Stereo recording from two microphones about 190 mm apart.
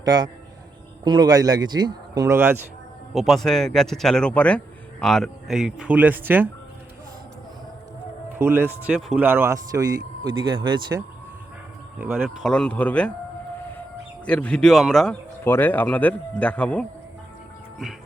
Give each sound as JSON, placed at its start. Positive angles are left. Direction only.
{"t": 0.0, "sound": "a man's voice", "side_deg": -20}
{"t": 3.2, "sound": "speech", "side_deg": 0}
{"t": 8.4, "sound": "a man's voice", "side_deg": -10}
{"t": 11.9, "sound": "speech", "side_deg": -5}
{"t": 14.3, "sound": "speech", "side_deg": 5}